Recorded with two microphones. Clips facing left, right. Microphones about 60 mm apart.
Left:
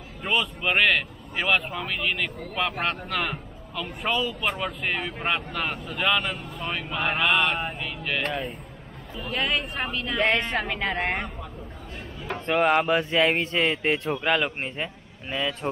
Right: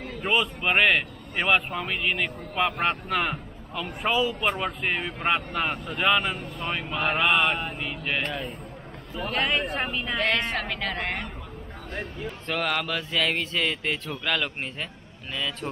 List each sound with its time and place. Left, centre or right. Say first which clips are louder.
0.2 s a man's voice: right 1 dB; centre
8.3 s speech: left 2 dB; centre
10.6 s speech: left 3 dB; centre
11.9 s speech: right 8 dB; right
12.4 s mantra: left 7 dB; left
14.2 s speech: even; centre